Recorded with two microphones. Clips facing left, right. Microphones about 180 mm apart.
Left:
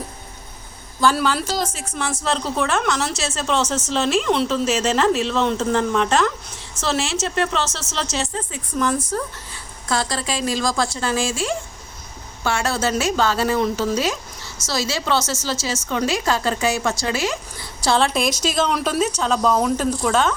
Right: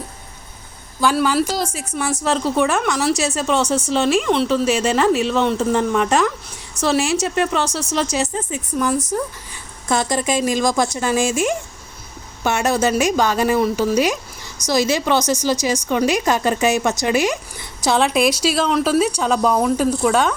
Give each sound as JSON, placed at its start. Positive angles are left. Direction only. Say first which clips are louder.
{"t": 1.1, "sound": "a woman's voice", "louder": "right 4 dB", "side_deg": -5}